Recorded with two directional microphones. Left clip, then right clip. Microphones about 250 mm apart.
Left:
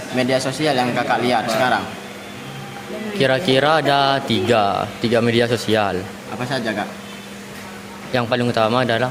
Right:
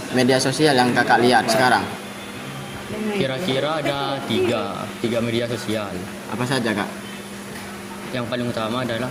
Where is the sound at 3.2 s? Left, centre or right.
Left.